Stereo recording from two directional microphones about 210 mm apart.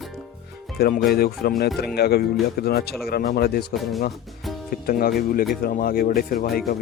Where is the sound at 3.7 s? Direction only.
Centre (ahead or behind).